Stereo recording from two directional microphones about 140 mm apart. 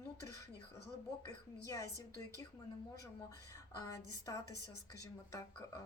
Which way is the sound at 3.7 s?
25° left (ahead or behind).